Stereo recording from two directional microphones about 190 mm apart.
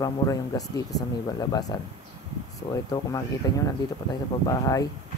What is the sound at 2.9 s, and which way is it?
Speech, 20° left (ahead or behind).